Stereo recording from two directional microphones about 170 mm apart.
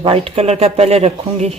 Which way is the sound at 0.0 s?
30° right (ahead or behind).